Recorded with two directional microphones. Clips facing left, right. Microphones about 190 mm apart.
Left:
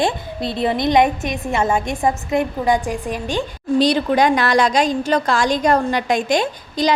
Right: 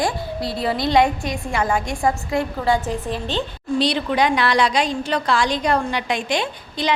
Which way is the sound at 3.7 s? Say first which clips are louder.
Left 4 dB; 45° left (ahead or behind).